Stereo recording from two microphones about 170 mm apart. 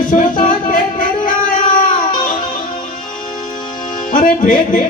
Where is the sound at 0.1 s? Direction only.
50° left (ahead or behind).